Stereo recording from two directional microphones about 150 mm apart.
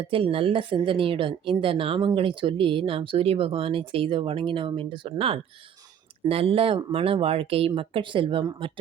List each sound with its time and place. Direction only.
0.0 s speech: 35° right (ahead or behind)